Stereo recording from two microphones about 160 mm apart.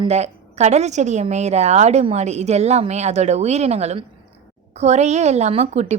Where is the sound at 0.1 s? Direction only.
45° right (ahead or behind).